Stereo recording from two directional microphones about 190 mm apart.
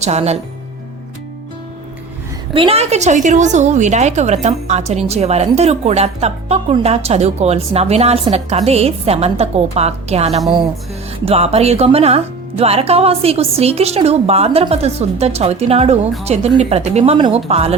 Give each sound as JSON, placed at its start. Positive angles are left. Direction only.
{"t": 0.0, "sound": "a woman's voice", "side_deg": -35}
{"t": 2.5, "sound": "a woman's voice", "side_deg": -30}